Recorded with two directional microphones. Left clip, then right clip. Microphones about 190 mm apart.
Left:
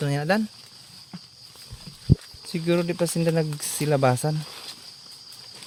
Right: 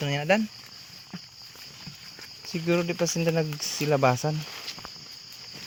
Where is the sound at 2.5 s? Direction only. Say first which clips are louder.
Left 2 dB; 30° left (ahead or behind).